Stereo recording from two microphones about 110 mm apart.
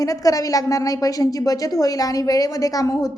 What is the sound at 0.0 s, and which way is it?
A woman's voice, 30° left (ahead or behind).